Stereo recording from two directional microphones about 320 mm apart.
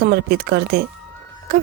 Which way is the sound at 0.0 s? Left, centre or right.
Right.